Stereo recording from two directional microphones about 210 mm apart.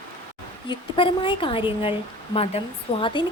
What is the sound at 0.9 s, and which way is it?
Speech, 25° left (ahead or behind).